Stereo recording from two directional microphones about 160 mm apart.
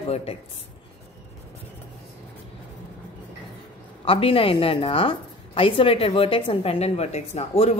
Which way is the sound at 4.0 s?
35° left (ahead or behind).